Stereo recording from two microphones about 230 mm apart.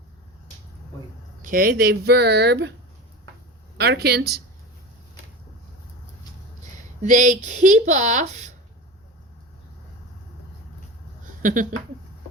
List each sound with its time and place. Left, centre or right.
1.4 s speech: right
3.8 s speech: right
7.0 s speech: right
11.4 s speech: right